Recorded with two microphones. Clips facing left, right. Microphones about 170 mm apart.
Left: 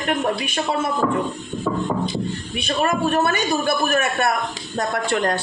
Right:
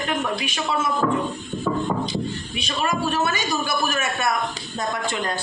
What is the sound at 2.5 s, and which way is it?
A woman's voice, 55° left (ahead or behind).